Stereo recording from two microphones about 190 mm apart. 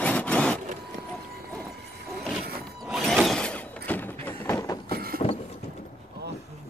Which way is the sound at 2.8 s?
Centre (ahead or behind).